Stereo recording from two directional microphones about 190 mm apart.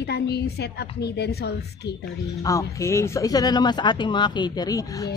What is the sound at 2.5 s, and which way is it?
A woman's voice, 15° left (ahead or behind).